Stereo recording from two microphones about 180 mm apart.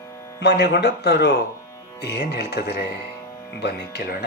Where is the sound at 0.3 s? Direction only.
65° left (ahead or behind).